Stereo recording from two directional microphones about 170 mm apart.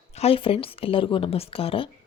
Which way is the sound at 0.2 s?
35° left (ahead or behind).